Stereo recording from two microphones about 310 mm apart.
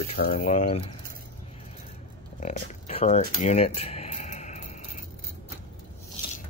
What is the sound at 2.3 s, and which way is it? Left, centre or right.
Cutlery, left.